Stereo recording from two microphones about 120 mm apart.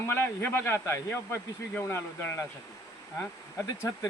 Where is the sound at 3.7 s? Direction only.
30° left (ahead or behind).